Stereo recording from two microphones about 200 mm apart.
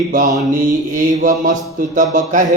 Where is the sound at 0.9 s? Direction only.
40° right (ahead or behind).